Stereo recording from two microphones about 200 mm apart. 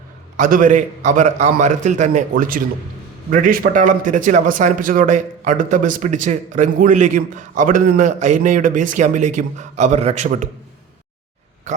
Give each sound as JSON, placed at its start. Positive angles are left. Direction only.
{"t": 0.3, "sound": "a man's voice", "side_deg": -40}